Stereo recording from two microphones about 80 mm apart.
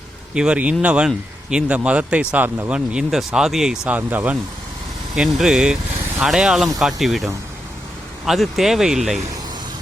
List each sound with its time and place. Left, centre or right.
0.3 s speech: centre
3.8 s speech: centre
5.1 s speech: centre
8.3 s speech: centre